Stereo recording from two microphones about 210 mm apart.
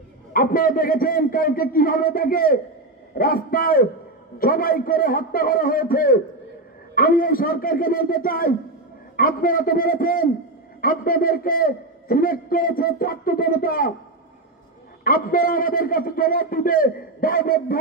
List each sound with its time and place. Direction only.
0.3 s a man's voice: 45° left (ahead or behind)
15.0 s a man's voice: 45° left (ahead or behind)